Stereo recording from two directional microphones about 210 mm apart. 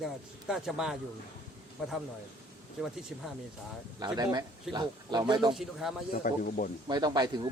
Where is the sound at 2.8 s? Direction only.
Centre (ahead or behind).